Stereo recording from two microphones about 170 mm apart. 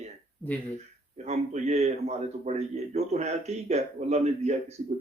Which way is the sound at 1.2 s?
40° right (ahead or behind).